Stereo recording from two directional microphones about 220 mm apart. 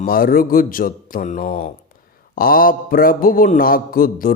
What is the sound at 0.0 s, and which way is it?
Speech, 40° left (ahead or behind).